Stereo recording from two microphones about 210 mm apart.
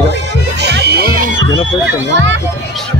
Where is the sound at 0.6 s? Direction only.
50° right (ahead or behind).